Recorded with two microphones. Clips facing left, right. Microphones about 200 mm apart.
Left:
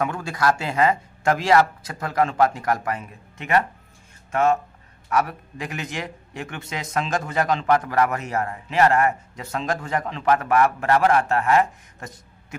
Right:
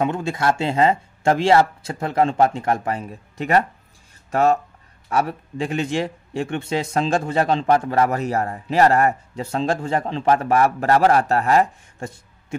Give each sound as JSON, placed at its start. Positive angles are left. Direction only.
{"t": 0.0, "sound": "a man's voice", "side_deg": -25}